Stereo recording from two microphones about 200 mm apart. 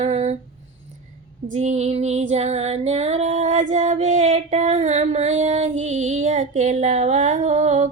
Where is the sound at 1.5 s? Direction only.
35° right (ahead or behind).